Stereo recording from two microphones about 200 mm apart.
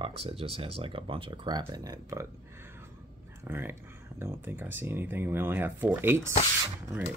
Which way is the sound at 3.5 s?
10° right (ahead or behind).